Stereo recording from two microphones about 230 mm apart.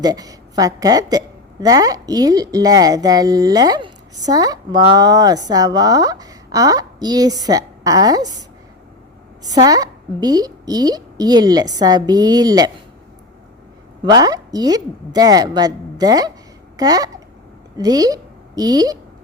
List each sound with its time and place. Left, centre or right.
0.0 s a woman's voice: centre
14.0 s a woman's voice: centre